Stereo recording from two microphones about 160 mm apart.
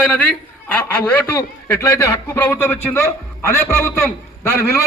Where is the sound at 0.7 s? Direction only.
10° left (ahead or behind).